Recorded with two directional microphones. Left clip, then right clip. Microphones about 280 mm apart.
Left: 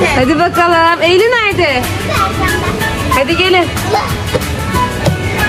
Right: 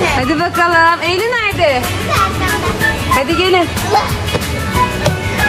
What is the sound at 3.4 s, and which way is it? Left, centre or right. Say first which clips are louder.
Speech: left 2 dB; centre.